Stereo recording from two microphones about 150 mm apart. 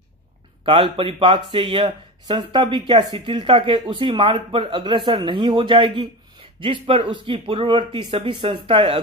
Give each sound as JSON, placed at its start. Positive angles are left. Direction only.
{"t": 0.7, "sound": "speech", "side_deg": -35}